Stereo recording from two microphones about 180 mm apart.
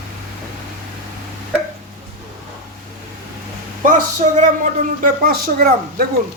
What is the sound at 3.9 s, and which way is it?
Speech, 45° right (ahead or behind).